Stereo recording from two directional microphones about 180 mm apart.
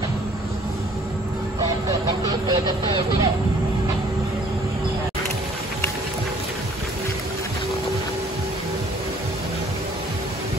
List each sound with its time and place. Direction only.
1.9 s speech: 20° right (ahead or behind)